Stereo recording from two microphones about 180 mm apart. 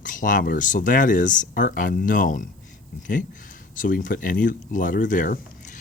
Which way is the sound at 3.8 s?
50° left (ahead or behind).